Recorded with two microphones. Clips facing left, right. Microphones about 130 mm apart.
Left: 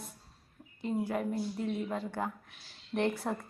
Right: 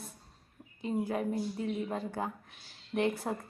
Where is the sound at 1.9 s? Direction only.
40° right (ahead or behind).